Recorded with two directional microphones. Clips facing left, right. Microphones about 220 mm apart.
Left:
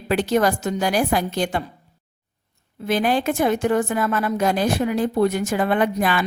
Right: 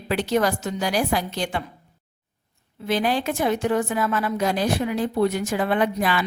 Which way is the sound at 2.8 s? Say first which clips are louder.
Left 3 dB; 50° left (ahead or behind).